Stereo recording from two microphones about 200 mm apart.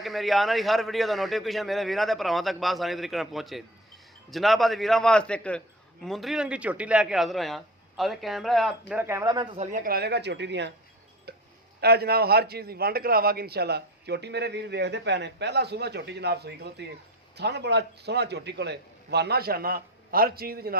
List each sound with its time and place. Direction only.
0.0 s a man's voice: centre (ahead or behind)
8.9 s speech: 10° right (ahead or behind)
9.6 s a man's voice: 45° right (ahead or behind); by 10.7 s 60° right (ahead or behind)
11.3 s tick-tock: 55° right (ahead or behind)
11.8 s a man's voice: 55° right (ahead or behind)